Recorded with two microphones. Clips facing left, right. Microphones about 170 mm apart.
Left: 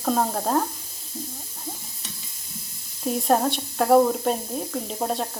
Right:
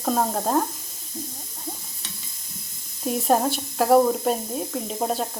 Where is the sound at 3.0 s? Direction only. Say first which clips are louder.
Even; centre (ahead or behind).